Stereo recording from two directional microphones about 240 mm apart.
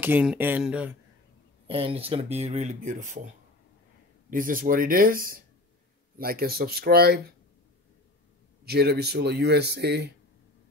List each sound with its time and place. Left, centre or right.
0.0 s speech: centre
1.7 s speech: right
4.3 s speech: right
8.6 s speech: right